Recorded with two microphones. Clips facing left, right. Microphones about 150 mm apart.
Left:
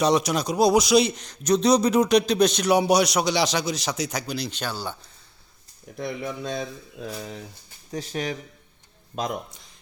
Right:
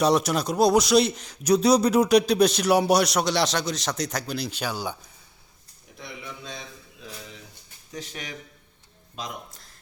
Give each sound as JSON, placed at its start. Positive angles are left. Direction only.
{"t": 0.0, "sound": "a man's voice", "side_deg": 0}
{"t": 6.0, "sound": "speech", "side_deg": 50}
{"t": 7.9, "sound": "speech", "side_deg": 35}
{"t": 9.1, "sound": "speech", "side_deg": 50}